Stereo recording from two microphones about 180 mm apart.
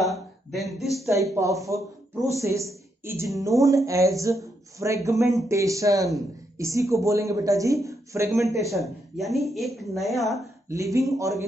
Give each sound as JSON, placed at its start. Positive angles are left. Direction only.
{"t": 0.0, "sound": "a sound", "side_deg": 0}
{"t": 1.0, "sound": "speech", "side_deg": -15}
{"t": 8.7, "sound": "a woman's voice", "side_deg": 0}
{"t": 10.7, "sound": "speech", "side_deg": -15}